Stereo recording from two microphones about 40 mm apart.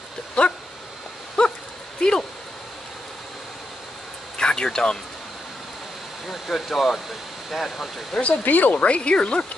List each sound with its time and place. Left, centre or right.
0.4 s dog: left
2.0 s speech: centre
4.4 s a sound: centre
6.2 s speech: centre
8.5 s speech: left
8.7 s speech: left